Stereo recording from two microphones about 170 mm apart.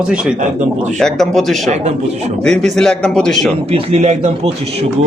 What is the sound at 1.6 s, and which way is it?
Speech, 40° right (ahead or behind).